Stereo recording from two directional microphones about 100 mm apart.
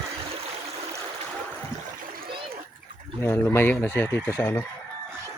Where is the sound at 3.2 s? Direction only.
25° left (ahead or behind).